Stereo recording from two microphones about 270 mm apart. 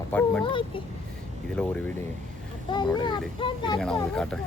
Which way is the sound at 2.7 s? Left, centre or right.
Centre.